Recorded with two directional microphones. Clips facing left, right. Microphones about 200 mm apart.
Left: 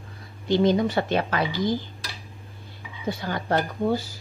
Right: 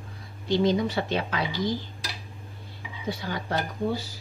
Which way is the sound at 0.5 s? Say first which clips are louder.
Left 3 dB; 50° left (ahead or behind).